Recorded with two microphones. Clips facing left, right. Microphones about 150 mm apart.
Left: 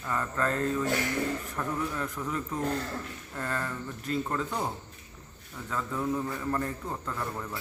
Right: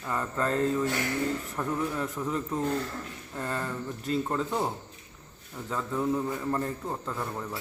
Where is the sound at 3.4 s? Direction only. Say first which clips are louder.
Right 1 dB; 15° right (ahead or behind).